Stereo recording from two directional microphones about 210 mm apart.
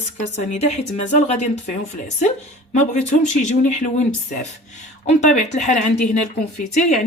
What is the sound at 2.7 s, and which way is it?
Speech, 35° left (ahead or behind).